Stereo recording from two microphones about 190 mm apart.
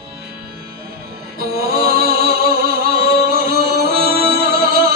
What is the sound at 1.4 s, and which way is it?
Music, 55° right (ahead or behind).